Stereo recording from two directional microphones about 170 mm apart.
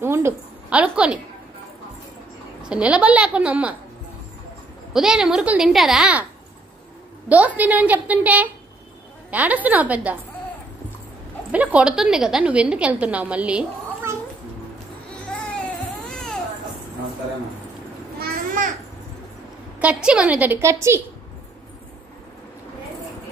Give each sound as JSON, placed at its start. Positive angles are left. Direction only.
{"t": 0.0, "sound": "a woman's voice", "side_deg": -15}
{"t": 2.7, "sound": "a woman's voice", "side_deg": -5}
{"t": 4.9, "sound": "a woman's voice", "side_deg": -5}
{"t": 7.2, "sound": "a woman's voice", "side_deg": -10}
{"t": 11.5, "sound": "a woman's voice", "side_deg": -10}
{"t": 18.2, "sound": "a sound", "side_deg": -50}
{"t": 19.8, "sound": "a woman's voice", "side_deg": -5}